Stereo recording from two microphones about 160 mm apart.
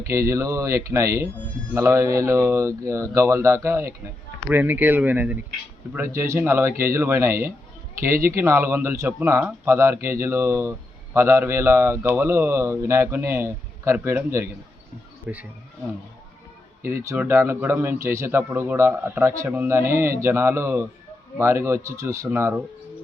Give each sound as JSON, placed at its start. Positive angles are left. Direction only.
{"t": 0.1, "sound": "speech", "side_deg": -20}
{"t": 16.8, "sound": "speech", "side_deg": -15}